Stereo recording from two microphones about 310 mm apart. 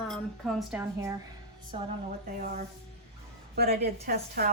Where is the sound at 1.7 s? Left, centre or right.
Centre.